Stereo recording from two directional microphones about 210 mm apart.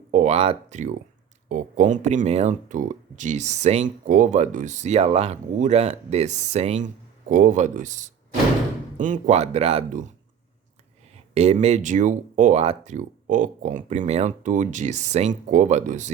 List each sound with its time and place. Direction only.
0.1 s speech: 35° right (ahead or behind)
11.3 s speech: 30° right (ahead or behind)